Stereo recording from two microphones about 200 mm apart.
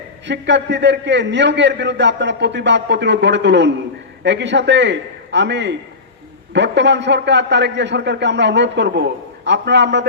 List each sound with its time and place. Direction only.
0.3 s a man's voice: 60° right (ahead or behind)